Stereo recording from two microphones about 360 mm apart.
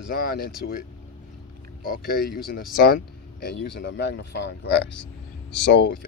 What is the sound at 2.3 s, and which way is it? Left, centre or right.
Speech, centre.